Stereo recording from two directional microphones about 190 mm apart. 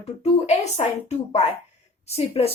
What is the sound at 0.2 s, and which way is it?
Speech, 35° left (ahead or behind).